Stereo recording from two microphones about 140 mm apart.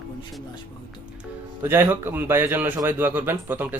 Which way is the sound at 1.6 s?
15° right (ahead or behind).